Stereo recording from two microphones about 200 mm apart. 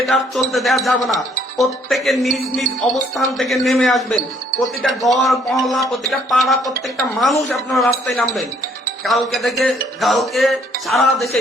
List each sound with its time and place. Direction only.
0.0 s speech: centre (ahead or behind)
9.0 s speech: centre (ahead or behind)